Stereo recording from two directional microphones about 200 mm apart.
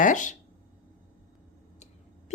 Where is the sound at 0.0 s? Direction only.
40° left (ahead or behind).